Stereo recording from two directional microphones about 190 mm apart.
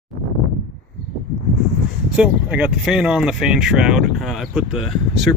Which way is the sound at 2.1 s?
5° right (ahead or behind).